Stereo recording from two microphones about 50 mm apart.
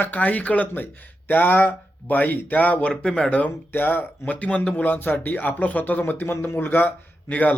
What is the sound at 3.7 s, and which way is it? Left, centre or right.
Speech, left.